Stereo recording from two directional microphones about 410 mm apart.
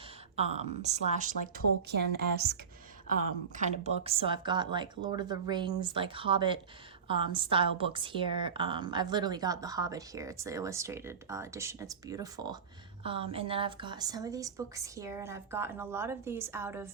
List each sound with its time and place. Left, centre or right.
0.3 s a woman's voice: centre